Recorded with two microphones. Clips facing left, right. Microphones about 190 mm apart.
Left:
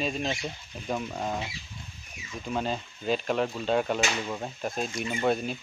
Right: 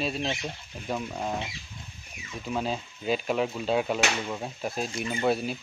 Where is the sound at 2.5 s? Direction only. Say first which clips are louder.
Even; 5° right (ahead or behind).